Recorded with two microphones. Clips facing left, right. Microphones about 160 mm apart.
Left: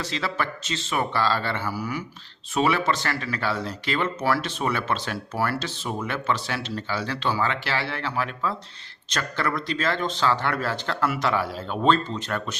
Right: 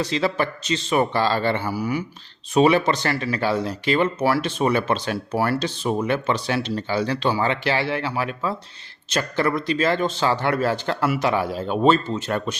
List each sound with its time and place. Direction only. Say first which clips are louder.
0.0 s speech: right 6 dB; 15° right (ahead or behind)